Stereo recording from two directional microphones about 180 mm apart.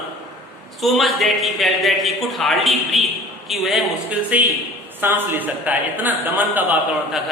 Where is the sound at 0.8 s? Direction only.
Centre (ahead or behind).